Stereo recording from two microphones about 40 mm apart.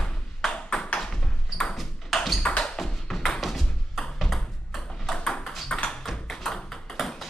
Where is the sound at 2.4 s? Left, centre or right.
Left.